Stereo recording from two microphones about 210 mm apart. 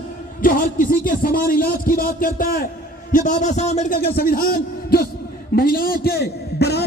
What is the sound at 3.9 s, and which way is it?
A man's voice, 45° left (ahead or behind).